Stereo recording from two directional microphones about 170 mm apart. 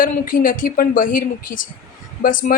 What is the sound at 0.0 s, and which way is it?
A woman's voice, 55° left (ahead or behind).